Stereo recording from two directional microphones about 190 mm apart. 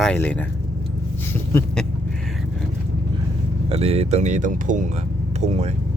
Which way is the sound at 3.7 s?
30° right (ahead or behind).